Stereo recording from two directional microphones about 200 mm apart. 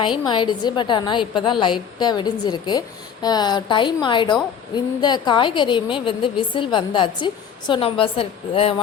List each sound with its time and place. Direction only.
0.3 s a woman's voice: 20° left (ahead or behind)